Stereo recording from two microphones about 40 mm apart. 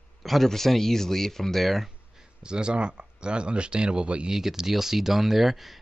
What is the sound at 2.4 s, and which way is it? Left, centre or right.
Speech, right.